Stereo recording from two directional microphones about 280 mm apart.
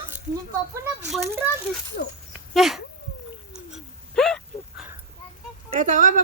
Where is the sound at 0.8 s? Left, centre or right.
Centre.